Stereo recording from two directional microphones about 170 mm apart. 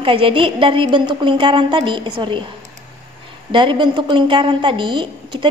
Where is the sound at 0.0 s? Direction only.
30° right (ahead or behind).